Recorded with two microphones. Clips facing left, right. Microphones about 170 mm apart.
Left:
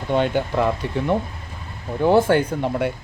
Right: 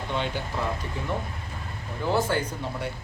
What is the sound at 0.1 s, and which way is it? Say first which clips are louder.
Speech: left 11 dB; 55° left (ahead or behind).